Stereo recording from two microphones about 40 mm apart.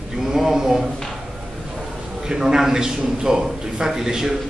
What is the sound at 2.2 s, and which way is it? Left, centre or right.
A man's voice, centre.